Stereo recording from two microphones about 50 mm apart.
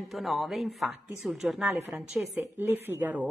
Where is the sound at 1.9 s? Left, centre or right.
Right.